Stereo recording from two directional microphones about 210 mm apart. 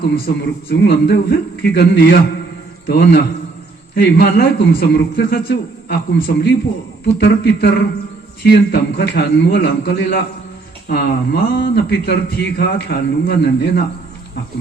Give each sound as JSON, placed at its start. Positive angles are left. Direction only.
{"t": 0.7, "sound": "a man's voice", "side_deg": 50}